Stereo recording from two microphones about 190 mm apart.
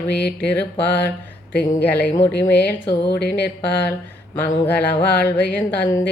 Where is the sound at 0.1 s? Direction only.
60° left (ahead or behind).